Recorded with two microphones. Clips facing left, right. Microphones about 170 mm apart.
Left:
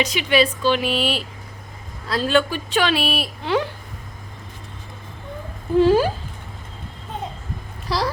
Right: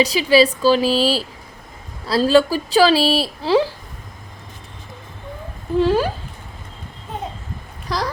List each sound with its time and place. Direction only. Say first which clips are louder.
0.0 s speech: right 5 dB; 35° right (ahead or behind)
5.8 s speech: left 2 dB; 5° left (ahead or behind)
7.9 s speech: left 1 dB; 5° left (ahead or behind)